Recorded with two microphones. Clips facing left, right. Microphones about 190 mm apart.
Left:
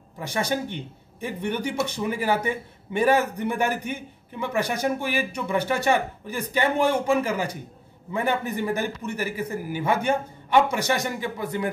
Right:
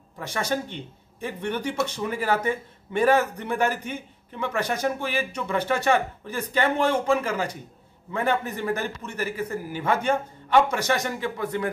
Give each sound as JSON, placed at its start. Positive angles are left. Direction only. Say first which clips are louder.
{"t": 0.3, "sound": "a man's voice", "louder": "left 1 dB", "side_deg": 15}